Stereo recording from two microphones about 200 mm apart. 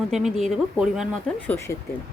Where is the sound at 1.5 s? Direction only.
15° left (ahead or behind).